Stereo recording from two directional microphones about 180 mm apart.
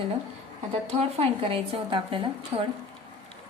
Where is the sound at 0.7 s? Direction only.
35° right (ahead or behind).